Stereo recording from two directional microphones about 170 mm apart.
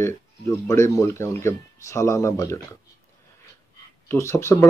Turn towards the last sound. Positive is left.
turn(degrees=15)  # may be behind; listen again after turning